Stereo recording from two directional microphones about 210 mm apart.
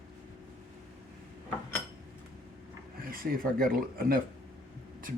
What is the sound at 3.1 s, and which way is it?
Speech, 45° right (ahead or behind).